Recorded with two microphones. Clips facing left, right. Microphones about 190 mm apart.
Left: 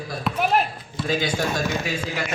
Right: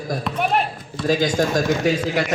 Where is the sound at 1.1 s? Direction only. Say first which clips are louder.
Right 5 dB; 45° right (ahead or behind).